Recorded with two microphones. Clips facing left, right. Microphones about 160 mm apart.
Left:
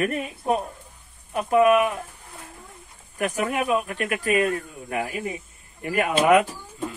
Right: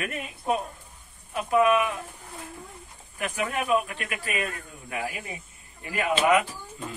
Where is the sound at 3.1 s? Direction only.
45° left (ahead or behind).